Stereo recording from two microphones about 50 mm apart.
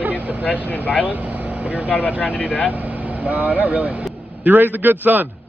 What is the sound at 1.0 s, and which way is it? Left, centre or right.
Speech, right.